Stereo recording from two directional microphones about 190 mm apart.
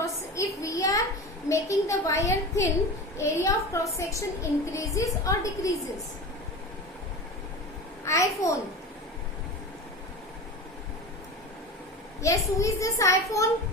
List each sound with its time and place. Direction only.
0.0 s a sound: 15° left (ahead or behind)
1.5 s a child's voice: 15° left (ahead or behind)
8.0 s a child's voice: 15° left (ahead or behind)
12.2 s a child's voice: 15° left (ahead or behind)